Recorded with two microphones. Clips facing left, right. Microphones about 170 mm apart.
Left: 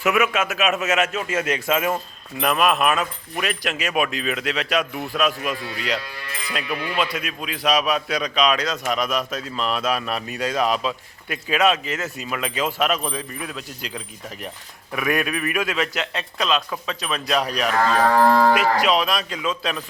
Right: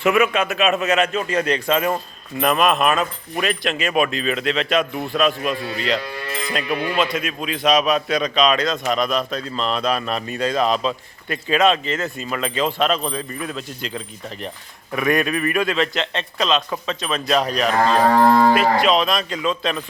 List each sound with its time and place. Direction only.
0.0 s speech: 5° left (ahead or behind)
7.2 s speech: centre (ahead or behind)
17.7 s cattle: 30° right (ahead or behind)
18.8 s speech: 10° left (ahead or behind)